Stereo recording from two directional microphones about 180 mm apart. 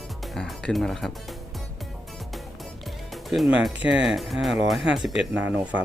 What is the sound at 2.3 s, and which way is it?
Speech, centre (ahead or behind).